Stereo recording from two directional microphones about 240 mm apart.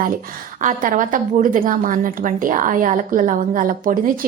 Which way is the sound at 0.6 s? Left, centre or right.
Right.